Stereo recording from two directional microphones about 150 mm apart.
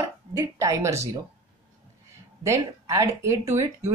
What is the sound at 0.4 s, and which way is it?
Speech, 20° right (ahead or behind).